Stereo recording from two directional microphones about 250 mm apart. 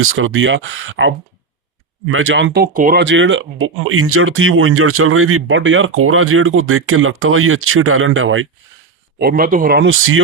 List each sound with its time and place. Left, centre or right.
0.0 s speech: right
3.0 s speech: right
9.1 s speech: right